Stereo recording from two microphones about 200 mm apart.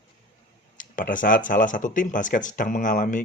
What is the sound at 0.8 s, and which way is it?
Speech, 40° left (ahead or behind).